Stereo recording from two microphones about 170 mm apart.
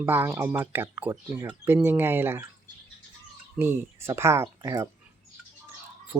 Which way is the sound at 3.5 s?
15° right (ahead or behind).